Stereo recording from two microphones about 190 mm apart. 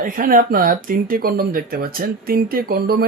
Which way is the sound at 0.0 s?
50° right (ahead or behind).